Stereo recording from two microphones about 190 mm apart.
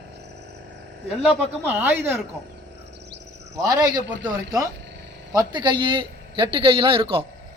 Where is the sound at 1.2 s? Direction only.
10° right (ahead or behind).